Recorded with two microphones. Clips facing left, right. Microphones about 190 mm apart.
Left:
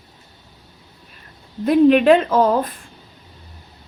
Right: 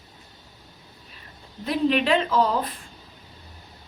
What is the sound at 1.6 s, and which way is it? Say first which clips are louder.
A woman's voice: left 10 dB; 50° left (ahead or behind).